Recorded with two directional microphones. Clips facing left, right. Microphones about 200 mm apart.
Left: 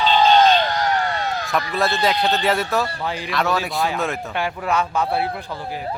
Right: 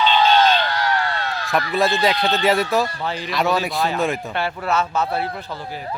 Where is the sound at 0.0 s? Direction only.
35° left (ahead or behind).